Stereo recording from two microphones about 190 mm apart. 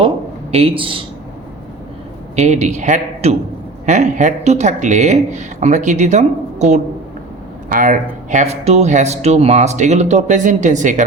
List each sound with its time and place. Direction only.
0.5 s speech: 30° right (ahead or behind)
2.3 s speech: 35° right (ahead or behind)